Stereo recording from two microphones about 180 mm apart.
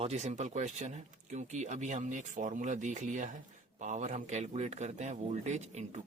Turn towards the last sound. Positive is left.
turn(degrees=-40)  # may be behind; listen again after turning